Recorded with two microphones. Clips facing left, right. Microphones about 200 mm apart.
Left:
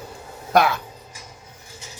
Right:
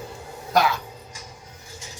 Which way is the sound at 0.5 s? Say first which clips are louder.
Left 3 dB; 55° left (ahead or behind).